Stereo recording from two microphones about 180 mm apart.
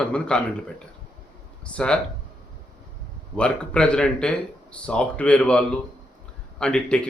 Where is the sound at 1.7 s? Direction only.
5° left (ahead or behind).